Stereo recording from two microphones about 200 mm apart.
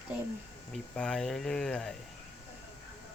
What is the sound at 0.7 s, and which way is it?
Speech, 5° left (ahead or behind).